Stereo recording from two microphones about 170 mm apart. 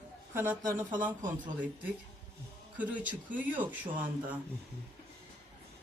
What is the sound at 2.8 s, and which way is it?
Speech, 10° right (ahead or behind).